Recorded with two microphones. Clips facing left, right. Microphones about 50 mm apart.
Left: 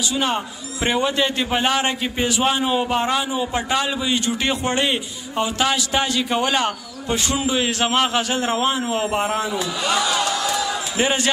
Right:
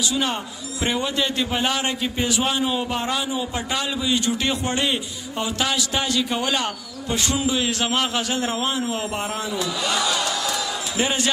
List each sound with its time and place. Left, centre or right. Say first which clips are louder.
0.1 s a man's voice: left 2 dB; centre